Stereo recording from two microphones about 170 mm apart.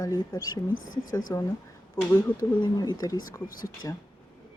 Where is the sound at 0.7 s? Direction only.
55° left (ahead or behind).